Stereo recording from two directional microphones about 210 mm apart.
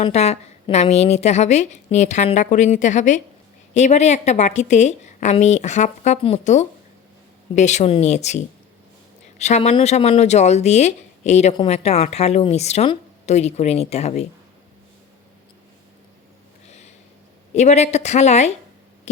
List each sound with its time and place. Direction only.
0.0 s a woman's voice: 30° left (ahead or behind)
17.5 s a woman's voice: 35° left (ahead or behind)
19.1 s a sound: 35° left (ahead or behind)